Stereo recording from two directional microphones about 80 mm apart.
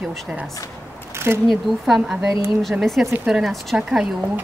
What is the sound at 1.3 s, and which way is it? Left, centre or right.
Speech, right.